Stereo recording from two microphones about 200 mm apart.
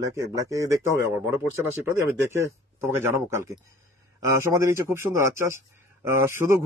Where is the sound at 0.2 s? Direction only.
15° right (ahead or behind).